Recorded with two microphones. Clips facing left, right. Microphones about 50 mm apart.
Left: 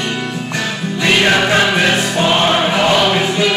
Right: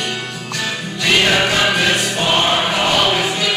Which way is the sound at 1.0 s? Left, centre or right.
Left.